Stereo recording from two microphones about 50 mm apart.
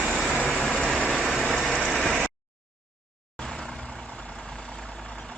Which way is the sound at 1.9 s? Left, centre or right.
Centre.